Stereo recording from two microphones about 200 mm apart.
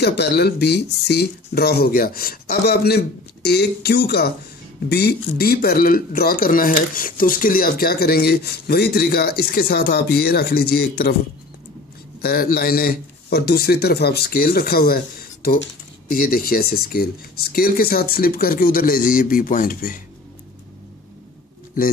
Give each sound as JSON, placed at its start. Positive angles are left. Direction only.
{"t": 0.0, "sound": "speech", "side_deg": 55}
{"t": 12.2, "sound": "speech", "side_deg": 50}